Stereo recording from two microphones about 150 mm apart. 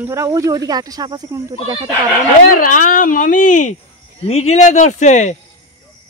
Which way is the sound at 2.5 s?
65° left (ahead or behind).